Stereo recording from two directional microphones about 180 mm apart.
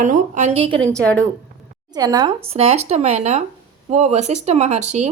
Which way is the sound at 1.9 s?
20° right (ahead or behind).